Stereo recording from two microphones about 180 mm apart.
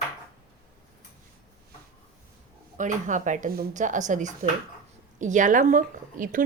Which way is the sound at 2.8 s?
45° right (ahead or behind).